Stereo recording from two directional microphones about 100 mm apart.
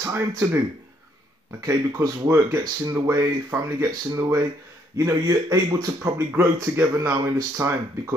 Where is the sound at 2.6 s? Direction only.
40° right (ahead or behind).